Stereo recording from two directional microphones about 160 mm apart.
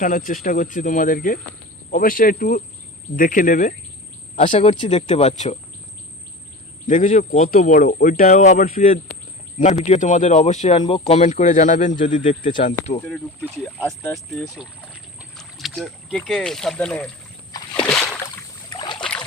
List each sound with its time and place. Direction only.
0.0 s speech: 55° left (ahead or behind)
4.4 s speech: 35° left (ahead or behind)
6.8 s speech: 55° left (ahead or behind)
8.2 s speech: 50° left (ahead or behind)
9.8 s speech: 45° left (ahead or behind)
14.1 s speech: centre (ahead or behind)
17.8 s a sound: 5° left (ahead or behind)
18.8 s boat: 30° left (ahead or behind)